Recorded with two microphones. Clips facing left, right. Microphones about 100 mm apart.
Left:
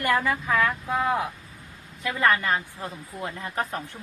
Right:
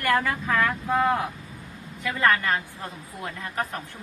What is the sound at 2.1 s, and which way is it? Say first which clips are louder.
A woman's voice: even; 15° left (ahead or behind).